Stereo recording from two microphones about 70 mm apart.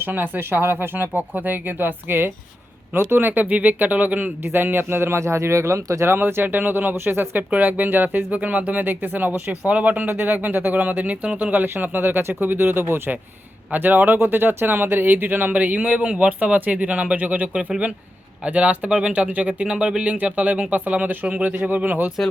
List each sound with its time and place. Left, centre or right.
0.0 s speech: right
6.1 s speech: right